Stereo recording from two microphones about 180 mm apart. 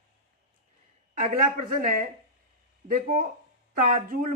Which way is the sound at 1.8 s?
50° right (ahead or behind).